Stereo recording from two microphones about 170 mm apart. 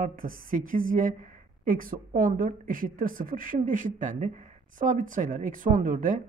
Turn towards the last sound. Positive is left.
turn(degrees=-50)  # may be behind; listen again after turning